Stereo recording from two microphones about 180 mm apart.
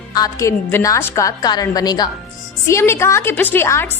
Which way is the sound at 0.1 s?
20° left (ahead or behind).